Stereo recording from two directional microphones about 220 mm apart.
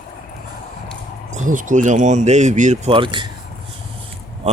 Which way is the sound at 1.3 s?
35° right (ahead or behind).